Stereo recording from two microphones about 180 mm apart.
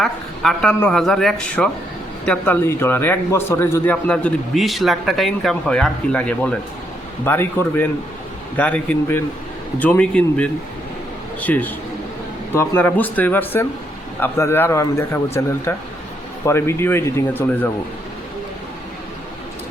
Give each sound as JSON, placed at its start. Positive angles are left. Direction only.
{"t": 0.0, "sound": "a man's voice", "side_deg": 0}